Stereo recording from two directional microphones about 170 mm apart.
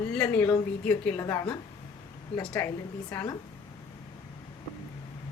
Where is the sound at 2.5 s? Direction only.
15° left (ahead or behind).